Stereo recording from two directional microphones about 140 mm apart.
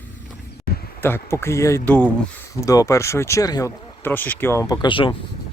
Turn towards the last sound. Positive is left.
turn(degrees=35)  # may be behind; listen again after turning